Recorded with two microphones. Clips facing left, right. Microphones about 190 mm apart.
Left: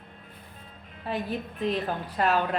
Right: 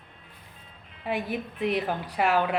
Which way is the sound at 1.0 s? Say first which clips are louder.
Right 1 dB; 10° right (ahead or behind).